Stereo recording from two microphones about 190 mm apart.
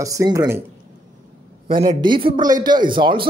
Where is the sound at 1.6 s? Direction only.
30° right (ahead or behind).